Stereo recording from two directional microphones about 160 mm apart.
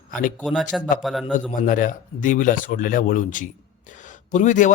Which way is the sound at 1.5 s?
60° left (ahead or behind).